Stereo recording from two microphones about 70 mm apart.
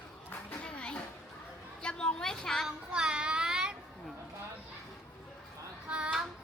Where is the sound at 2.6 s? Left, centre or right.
Centre.